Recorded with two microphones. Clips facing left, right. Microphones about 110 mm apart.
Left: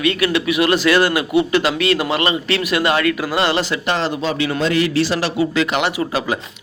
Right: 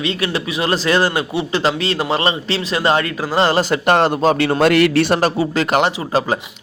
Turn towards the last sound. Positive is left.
turn(degrees=-40)  # may be behind; listen again after turning